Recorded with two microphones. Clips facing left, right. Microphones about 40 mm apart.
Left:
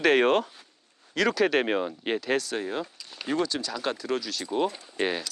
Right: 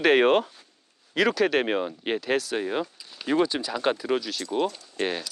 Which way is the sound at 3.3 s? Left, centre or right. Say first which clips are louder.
Right 4 dB; right.